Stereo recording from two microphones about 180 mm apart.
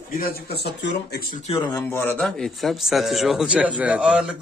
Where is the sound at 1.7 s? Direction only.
15° left (ahead or behind).